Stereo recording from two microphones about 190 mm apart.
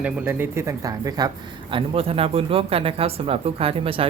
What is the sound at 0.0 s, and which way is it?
Speech, 10° right (ahead or behind).